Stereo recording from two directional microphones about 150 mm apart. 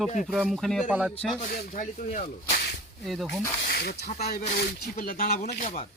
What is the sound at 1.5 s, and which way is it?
Speech, 60° left (ahead or behind).